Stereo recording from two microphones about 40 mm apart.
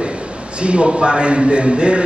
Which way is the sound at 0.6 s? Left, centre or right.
Right.